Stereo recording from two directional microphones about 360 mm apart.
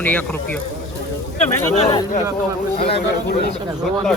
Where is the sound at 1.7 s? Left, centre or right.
Centre.